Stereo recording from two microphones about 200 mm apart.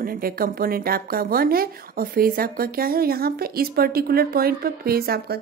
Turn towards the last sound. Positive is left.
turn(degrees=-50)  # may be behind; listen again after turning